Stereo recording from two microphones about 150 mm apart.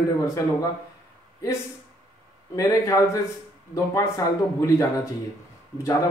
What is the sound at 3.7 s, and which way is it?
A man's voice, 20° left (ahead or behind).